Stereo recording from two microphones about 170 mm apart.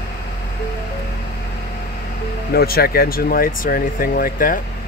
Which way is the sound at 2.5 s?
65° left (ahead or behind).